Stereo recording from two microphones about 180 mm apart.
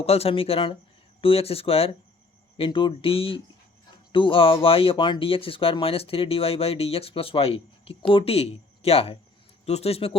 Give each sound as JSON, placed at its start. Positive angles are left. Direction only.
{"t": 0.0, "sound": "speech", "side_deg": 35}